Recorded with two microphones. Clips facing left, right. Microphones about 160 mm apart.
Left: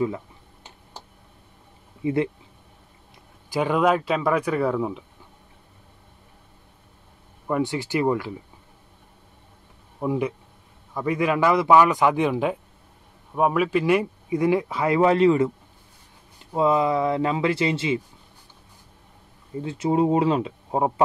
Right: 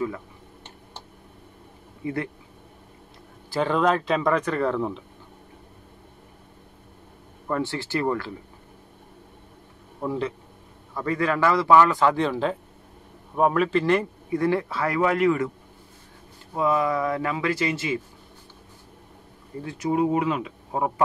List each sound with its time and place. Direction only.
2.0 s speech: 20° left (ahead or behind)
3.4 s speech: 10° left (ahead or behind)
7.4 s speech: 15° left (ahead or behind)
9.9 s speech: 15° left (ahead or behind)
16.5 s speech: 20° left (ahead or behind)
19.6 s speech: 25° left (ahead or behind)